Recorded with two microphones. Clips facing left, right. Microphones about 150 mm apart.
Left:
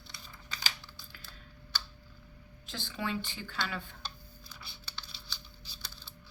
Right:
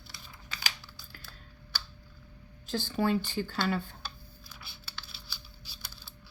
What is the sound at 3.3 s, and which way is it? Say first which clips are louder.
Speech: right 8 dB; 40° right (ahead or behind).